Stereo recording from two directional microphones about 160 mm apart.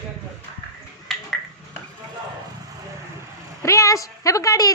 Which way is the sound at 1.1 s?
Centre (ahead or behind).